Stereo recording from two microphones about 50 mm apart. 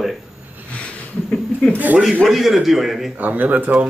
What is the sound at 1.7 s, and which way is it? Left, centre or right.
Speech, right.